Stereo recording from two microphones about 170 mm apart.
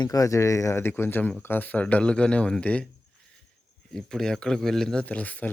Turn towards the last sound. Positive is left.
turn(degrees=10)  # may be behind; listen again after turning